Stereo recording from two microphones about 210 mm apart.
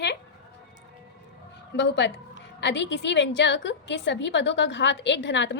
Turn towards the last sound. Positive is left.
turn(degrees=55)  # may be behind; listen again after turning